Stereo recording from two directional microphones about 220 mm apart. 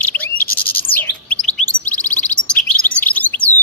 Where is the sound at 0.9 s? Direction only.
5° left (ahead or behind).